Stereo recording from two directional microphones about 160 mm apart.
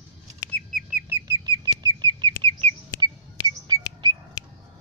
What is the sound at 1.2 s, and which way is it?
Bird, 30° right (ahead or behind).